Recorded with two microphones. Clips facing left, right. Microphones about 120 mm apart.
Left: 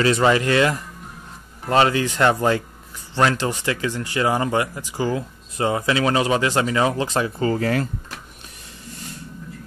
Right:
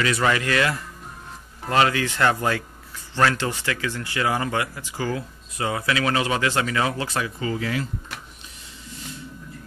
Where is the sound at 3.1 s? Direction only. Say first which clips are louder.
Left 2 dB; 15° left (ahead or behind).